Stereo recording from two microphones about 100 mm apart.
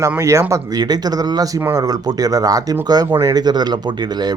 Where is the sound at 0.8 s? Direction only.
40° right (ahead or behind).